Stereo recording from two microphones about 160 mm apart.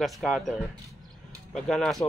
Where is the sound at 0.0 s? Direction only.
Centre (ahead or behind).